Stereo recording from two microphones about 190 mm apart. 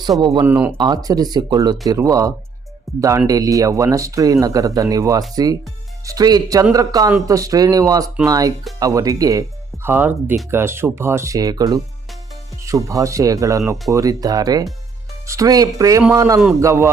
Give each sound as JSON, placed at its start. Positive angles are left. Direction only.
{"t": 0.2, "sound": "speech", "side_deg": -20}
{"t": 0.4, "sound": "speech", "side_deg": -10}
{"t": 0.8, "sound": "speech", "side_deg": -20}